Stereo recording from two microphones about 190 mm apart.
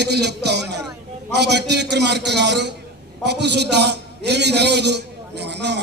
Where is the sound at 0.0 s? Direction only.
60° right (ahead or behind).